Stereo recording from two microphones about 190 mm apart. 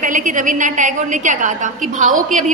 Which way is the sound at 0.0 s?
45° right (ahead or behind).